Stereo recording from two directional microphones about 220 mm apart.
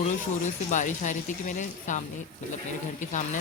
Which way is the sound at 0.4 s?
35° left (ahead or behind).